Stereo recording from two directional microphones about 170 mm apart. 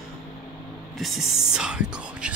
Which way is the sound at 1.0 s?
Centre (ahead or behind).